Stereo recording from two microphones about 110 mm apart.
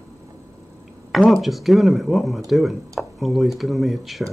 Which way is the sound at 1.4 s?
Centre (ahead or behind).